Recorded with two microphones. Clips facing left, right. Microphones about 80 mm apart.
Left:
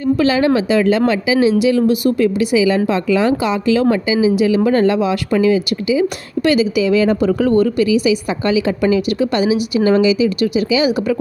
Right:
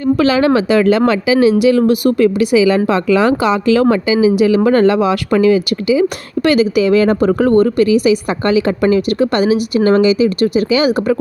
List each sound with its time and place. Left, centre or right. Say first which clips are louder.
0.2 s speech: right 3 dB; right